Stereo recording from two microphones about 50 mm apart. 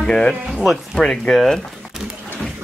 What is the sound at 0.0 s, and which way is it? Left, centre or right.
Speech, centre.